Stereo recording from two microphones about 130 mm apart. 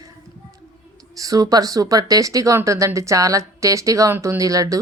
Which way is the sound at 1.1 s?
25° right (ahead or behind).